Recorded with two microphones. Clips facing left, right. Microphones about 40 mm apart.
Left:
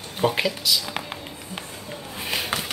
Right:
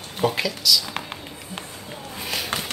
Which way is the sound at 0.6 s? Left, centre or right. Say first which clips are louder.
Right 3 dB; left.